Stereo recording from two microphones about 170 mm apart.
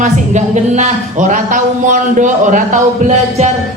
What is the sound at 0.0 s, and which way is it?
Speech, 45° right (ahead or behind).